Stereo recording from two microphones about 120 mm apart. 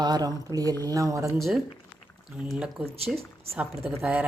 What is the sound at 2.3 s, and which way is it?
Speech, 5° right (ahead or behind).